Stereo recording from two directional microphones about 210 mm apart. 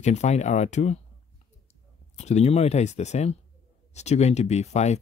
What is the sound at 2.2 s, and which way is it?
Speech, 30° left (ahead or behind).